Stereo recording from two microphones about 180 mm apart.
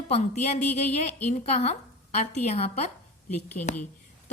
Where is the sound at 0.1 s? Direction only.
35° left (ahead or behind).